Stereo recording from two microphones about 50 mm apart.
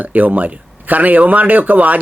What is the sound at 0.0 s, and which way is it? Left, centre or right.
Speech, right.